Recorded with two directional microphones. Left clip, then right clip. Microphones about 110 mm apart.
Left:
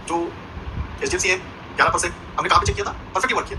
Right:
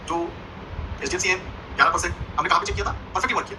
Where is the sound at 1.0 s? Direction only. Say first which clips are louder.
Left 3 dB; 30° right (ahead or behind).